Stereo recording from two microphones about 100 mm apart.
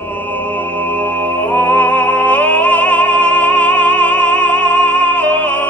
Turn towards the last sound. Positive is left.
turn(degrees=15)  # may be behind; listen again after turning